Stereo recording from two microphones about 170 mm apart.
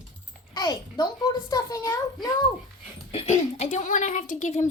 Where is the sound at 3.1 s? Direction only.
40° left (ahead or behind).